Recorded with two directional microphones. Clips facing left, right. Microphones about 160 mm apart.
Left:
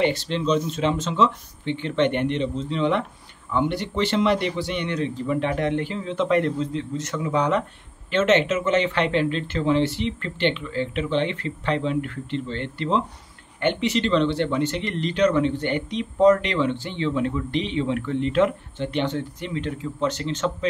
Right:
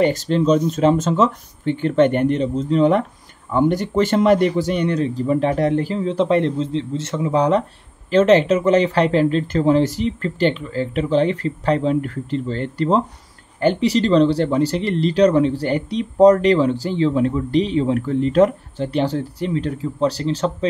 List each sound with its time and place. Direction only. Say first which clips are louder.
0.0 s speech: right 6 dB; 45° right (ahead or behind)